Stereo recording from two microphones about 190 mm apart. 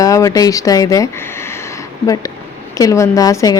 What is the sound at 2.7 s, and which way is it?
Speech, 15° left (ahead or behind).